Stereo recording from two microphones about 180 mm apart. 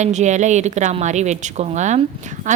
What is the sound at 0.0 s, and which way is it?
A woman's voice, 40° right (ahead or behind).